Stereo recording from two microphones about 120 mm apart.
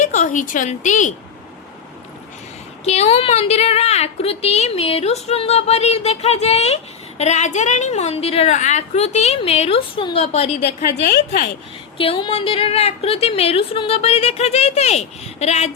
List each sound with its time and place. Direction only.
0.0 s a woman's voice: 90° left
2.8 s a woman's voice: 65° left (ahead or behind)
8.5 s a woman's voice: 75° left (ahead or behind)
11.9 s a woman's voice: 50° left (ahead or behind); by 15.7 s 65° left (ahead or behind)